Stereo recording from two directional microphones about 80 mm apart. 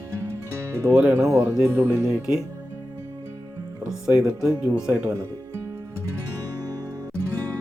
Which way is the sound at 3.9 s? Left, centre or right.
Centre.